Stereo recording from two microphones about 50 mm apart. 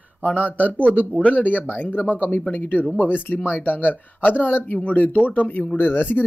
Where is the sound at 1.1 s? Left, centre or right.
Left.